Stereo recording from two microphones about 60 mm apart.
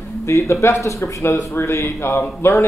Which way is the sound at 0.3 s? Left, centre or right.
Left.